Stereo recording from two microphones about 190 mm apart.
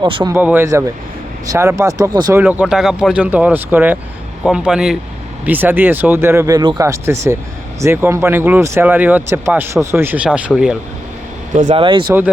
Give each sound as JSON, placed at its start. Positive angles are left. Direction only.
{"t": 0.0, "sound": "speech", "side_deg": -25}
{"t": 0.3, "sound": "speech", "side_deg": -10}
{"t": 2.4, "sound": "speech", "side_deg": -10}
{"t": 11.7, "sound": "speech", "side_deg": -25}